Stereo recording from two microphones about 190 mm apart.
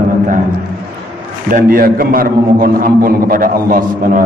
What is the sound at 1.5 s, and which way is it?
A man's voice, 50° right (ahead or behind).